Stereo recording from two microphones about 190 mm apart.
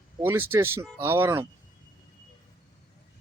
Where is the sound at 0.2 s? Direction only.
10° right (ahead or behind).